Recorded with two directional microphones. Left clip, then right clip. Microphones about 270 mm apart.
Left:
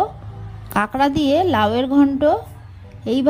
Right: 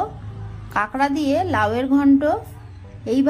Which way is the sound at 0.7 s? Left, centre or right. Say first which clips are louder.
Left 2 dB; left.